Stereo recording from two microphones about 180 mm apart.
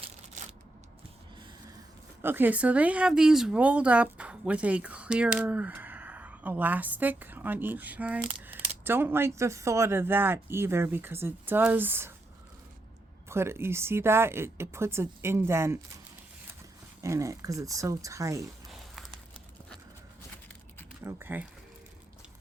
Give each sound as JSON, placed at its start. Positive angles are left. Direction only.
{"t": 2.2, "sound": "speech", "side_deg": -10}
{"t": 13.2, "sound": "speech", "side_deg": -15}
{"t": 17.0, "sound": "speech", "side_deg": -15}
{"t": 18.7, "sound": "a sound", "side_deg": 0}
{"t": 21.0, "sound": "speech", "side_deg": -10}